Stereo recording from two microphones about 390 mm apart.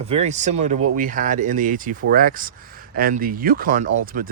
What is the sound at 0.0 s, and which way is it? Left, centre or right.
Speech, centre.